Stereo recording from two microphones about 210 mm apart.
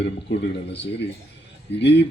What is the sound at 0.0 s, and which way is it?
A man's voice, 55° left (ahead or behind).